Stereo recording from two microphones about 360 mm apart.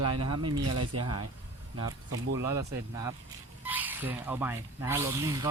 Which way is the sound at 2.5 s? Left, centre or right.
Centre.